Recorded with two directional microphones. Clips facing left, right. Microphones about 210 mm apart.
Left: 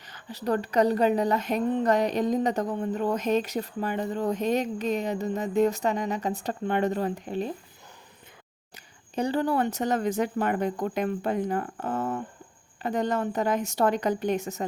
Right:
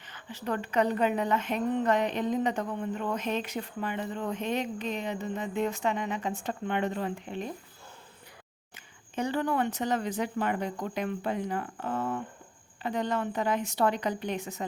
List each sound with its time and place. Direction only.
0.0 s a woman's voice: 40° left (ahead or behind)
8.7 s speech: 35° left (ahead or behind)